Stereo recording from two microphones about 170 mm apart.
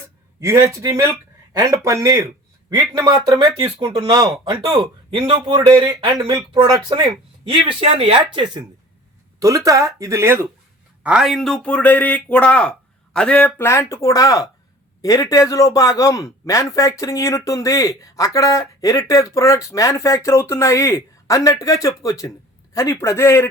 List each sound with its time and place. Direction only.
0.3 s speech: 15° right (ahead or behind)
9.4 s speech: 20° right (ahead or behind); by 23.5 s 15° left (ahead or behind)